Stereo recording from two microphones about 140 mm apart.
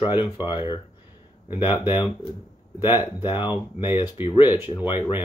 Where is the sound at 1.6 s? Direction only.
15° right (ahead or behind).